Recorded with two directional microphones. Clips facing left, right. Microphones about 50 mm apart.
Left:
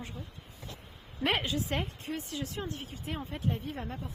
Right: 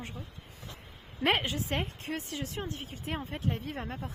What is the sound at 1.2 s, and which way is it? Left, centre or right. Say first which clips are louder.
Speech: right 2 dB; right.